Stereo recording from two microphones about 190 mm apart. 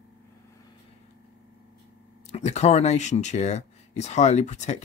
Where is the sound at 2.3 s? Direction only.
35° left (ahead or behind).